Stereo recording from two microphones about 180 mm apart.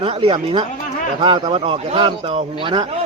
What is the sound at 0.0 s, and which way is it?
Speech, 30° right (ahead or behind).